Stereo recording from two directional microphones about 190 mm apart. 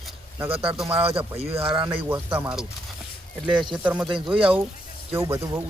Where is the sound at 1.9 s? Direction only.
10° right (ahead or behind).